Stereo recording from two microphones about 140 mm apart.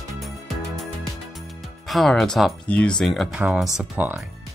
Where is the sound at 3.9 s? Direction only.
15° right (ahead or behind).